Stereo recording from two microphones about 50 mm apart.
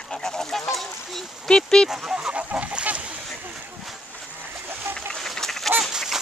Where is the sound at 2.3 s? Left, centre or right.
Right.